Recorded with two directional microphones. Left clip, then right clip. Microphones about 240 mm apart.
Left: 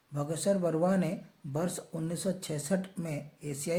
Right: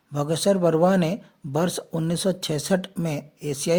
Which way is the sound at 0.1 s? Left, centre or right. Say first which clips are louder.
Right 9 dB; right.